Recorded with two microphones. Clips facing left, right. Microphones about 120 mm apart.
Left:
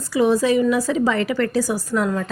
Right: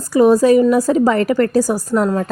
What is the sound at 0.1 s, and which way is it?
A woman's voice, 45° right (ahead or behind).